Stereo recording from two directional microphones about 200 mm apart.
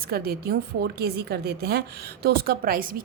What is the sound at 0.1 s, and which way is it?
A woman's voice, 50° right (ahead or behind).